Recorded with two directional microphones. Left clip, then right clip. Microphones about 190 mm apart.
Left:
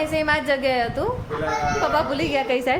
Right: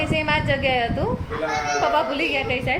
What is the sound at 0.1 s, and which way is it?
A woman's voice, 10° left (ahead or behind).